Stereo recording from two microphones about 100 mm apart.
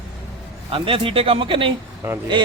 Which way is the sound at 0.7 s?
65° right (ahead or behind).